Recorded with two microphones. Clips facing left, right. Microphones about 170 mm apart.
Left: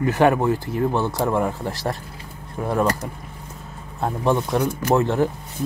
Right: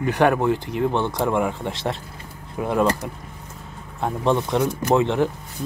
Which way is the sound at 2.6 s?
10° right (ahead or behind).